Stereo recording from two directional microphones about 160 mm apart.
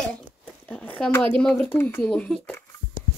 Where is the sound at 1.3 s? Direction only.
10° left (ahead or behind).